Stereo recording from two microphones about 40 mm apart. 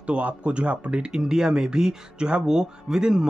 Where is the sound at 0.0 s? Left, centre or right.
Right.